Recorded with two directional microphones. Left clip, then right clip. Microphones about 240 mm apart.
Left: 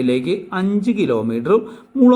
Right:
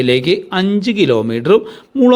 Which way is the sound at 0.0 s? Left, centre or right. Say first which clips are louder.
Right 6 dB; right.